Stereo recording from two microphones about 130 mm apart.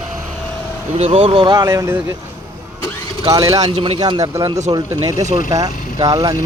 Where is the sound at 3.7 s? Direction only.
45° right (ahead or behind).